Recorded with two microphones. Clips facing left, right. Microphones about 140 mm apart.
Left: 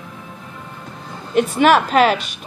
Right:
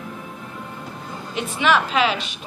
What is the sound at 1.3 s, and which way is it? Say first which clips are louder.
Speech: left 7 dB; 50° left (ahead or behind).